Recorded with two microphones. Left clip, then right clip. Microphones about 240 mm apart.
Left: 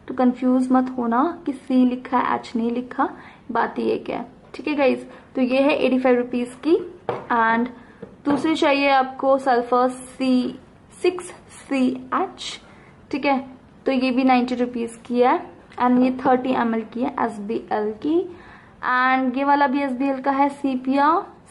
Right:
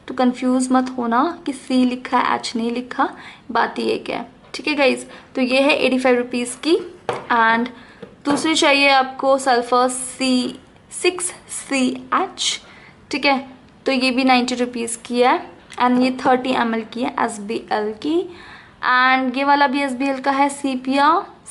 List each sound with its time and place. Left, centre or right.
0.6 s a woman's voice: centre
9.1 s speech: left
9.5 s a woman's voice: centre